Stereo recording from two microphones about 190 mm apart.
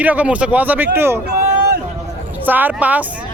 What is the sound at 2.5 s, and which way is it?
Speech, 10° right (ahead or behind).